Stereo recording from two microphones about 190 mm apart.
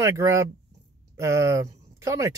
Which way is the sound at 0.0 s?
15° right (ahead or behind).